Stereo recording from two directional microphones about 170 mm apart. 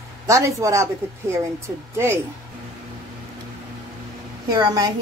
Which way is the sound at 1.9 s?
15° right (ahead or behind).